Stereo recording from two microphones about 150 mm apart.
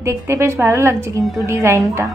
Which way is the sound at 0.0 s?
20° right (ahead or behind).